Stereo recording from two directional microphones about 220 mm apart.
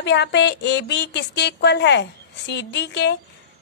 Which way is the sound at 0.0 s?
50° left (ahead or behind).